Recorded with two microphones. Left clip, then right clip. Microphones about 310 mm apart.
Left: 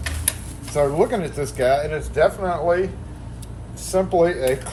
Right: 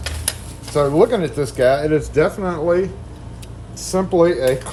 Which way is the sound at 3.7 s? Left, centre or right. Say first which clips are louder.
Right 2 dB; right.